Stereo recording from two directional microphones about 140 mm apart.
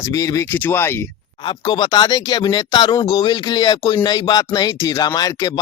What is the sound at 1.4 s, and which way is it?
Speech, 30° left (ahead or behind).